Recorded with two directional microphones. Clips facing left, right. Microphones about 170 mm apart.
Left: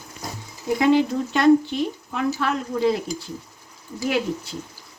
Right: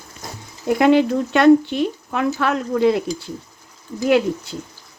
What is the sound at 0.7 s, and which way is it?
Speech, 65° right (ahead or behind).